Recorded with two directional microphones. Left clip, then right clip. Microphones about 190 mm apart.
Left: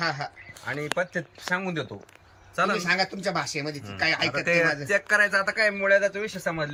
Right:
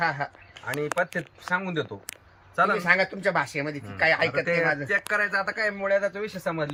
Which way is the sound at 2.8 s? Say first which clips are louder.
Right 3 dB; 10° right (ahead or behind).